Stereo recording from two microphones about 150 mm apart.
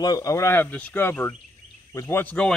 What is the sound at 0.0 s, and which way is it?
Speech, 25° left (ahead or behind).